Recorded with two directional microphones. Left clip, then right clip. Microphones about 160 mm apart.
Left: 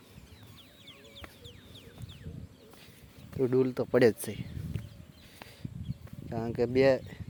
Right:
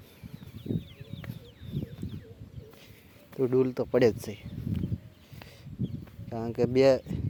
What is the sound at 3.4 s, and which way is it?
Speech, 5° right (ahead or behind).